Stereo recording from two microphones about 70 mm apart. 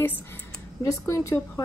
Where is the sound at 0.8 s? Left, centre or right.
Left.